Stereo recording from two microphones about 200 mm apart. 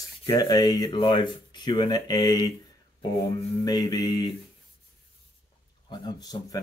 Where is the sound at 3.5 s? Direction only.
20° left (ahead or behind).